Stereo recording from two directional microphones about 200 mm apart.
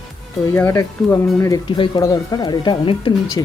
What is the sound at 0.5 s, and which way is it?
Speech, 10° left (ahead or behind).